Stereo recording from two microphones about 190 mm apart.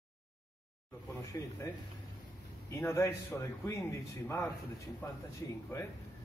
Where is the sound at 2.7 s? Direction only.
15° left (ahead or behind).